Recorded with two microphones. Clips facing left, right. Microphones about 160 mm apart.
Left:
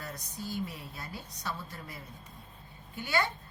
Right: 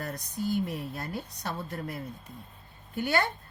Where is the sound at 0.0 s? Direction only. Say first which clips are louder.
Right 8 dB; 55° right (ahead or behind).